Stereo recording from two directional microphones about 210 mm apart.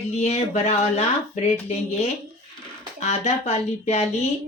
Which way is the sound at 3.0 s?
30° left (ahead or behind).